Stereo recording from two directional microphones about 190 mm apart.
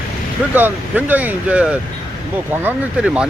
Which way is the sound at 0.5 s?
10° right (ahead or behind).